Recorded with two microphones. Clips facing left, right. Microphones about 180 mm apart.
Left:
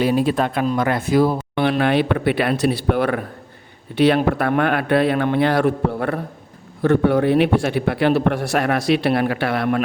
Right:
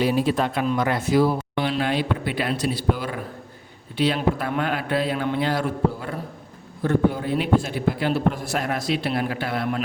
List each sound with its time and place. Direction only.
0.0 s speech: 55° left (ahead or behind)
6.8 s a man's voice: 70° left (ahead or behind)